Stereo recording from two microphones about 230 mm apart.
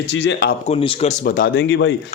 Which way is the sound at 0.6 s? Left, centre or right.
Left.